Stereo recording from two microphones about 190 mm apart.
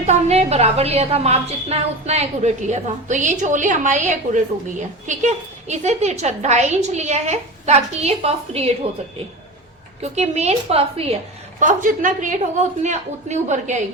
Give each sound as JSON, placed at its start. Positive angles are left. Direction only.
{"t": 0.0, "sound": "a woman's voice", "side_deg": -35}
{"t": 10.0, "sound": "a woman's voice", "side_deg": -35}
{"t": 11.6, "sound": "a woman's voice", "side_deg": -45}